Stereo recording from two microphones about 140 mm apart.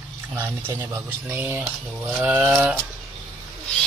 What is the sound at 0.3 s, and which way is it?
Speech, 15° right (ahead or behind).